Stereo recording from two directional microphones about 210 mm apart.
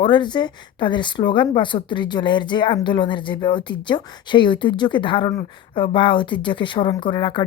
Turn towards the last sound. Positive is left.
turn(degrees=25)  # may be behind; listen again after turning